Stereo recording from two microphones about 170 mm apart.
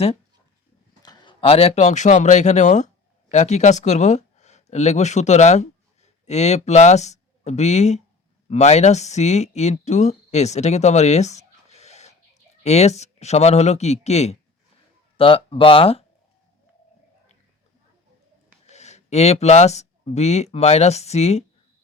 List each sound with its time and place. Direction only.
1.0 s speech: 25° left (ahead or behind)
18.6 s speech: 40° left (ahead or behind)